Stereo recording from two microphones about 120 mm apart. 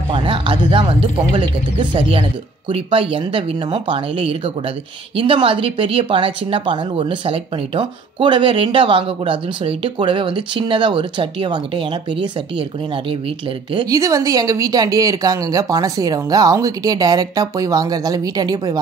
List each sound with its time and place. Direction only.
0.1 s speech: 45° right (ahead or behind)
13.8 s speech: 25° right (ahead or behind)